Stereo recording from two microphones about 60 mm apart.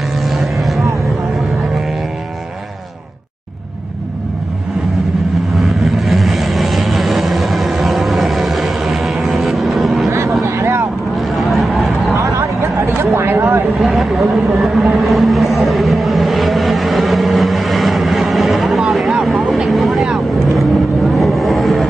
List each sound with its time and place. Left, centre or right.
0.2 s vehicle: centre
5.6 s vehicle: centre
10.6 s vehicle: right
11.1 s vehicle: centre
12.4 s a sound: right
13.7 s vehicle: centre